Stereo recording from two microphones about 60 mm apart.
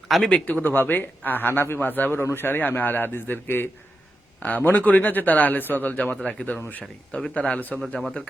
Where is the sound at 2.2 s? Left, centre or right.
Left.